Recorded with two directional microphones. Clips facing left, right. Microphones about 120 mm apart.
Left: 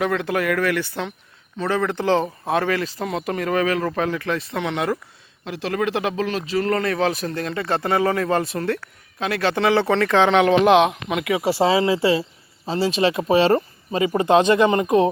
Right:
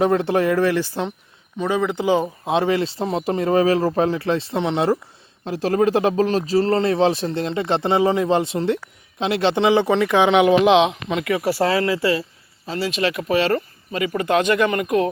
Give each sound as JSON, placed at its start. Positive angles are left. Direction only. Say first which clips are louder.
{"t": 0.0, "sound": "speech", "louder": "right 4 dB", "side_deg": -30}
{"t": 1.5, "sound": "speech", "louder": "right 1 dB", "side_deg": -15}
{"t": 10.7, "sound": "speech", "louder": "even", "side_deg": 5}
{"t": 11.4, "sound": "speech", "louder": "left 2 dB", "side_deg": 20}